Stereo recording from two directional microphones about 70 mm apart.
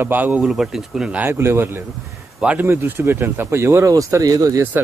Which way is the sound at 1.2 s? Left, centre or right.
Right.